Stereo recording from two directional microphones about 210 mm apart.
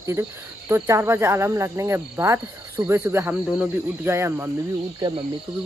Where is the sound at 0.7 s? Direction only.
15° right (ahead or behind).